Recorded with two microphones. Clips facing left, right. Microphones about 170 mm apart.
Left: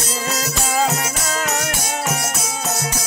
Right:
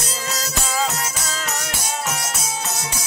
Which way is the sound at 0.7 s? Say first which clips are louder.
Left 5 dB; 50° left (ahead or behind).